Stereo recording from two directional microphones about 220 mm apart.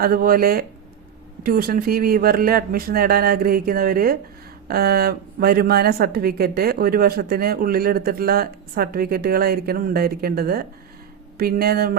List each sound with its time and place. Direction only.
0.0 s a woman's voice: 45° right (ahead or behind)